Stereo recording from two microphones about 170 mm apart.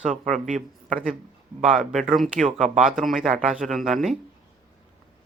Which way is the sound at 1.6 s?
Centre (ahead or behind).